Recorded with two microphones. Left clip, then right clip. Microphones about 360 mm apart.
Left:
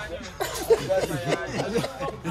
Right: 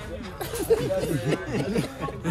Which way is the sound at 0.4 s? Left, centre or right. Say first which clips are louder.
Left 1 dB; left.